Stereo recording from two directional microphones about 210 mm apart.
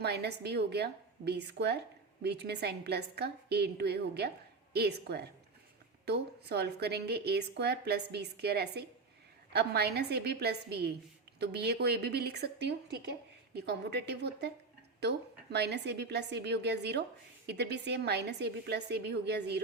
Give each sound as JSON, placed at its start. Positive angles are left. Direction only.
{"t": 0.0, "sound": "a woman's voice", "side_deg": -50}